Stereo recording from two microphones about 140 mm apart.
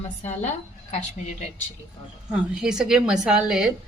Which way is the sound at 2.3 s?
5° right (ahead or behind).